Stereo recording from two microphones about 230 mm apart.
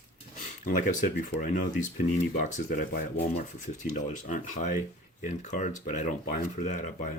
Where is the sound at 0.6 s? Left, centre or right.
Left.